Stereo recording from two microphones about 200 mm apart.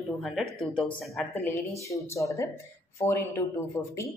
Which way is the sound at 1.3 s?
15° left (ahead or behind).